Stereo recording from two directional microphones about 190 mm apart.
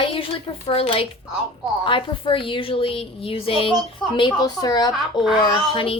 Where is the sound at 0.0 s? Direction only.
30° left (ahead or behind).